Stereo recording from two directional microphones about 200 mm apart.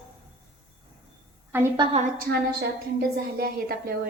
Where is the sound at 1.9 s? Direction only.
45° right (ahead or behind).